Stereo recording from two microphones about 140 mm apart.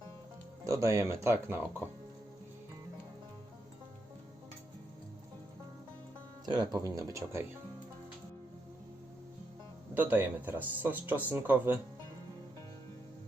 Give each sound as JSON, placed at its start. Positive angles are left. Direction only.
{"t": 0.6, "sound": "speech", "side_deg": -20}
{"t": 6.4, "sound": "speech", "side_deg": -30}
{"t": 9.9, "sound": "speech", "side_deg": -15}